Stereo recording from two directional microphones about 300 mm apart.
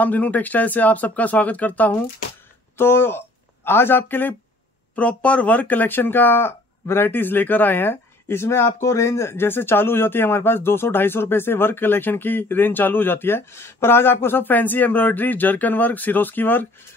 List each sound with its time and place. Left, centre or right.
0.0 s speech: centre